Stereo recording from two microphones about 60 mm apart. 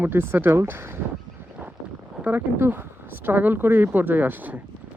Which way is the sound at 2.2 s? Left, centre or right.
Right.